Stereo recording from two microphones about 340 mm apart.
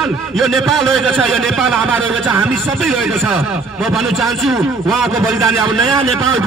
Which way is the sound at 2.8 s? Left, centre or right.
Centre.